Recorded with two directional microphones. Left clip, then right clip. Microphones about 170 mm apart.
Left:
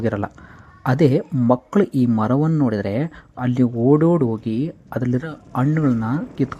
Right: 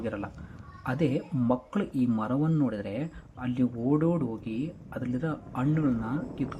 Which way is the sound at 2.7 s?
50° left (ahead or behind).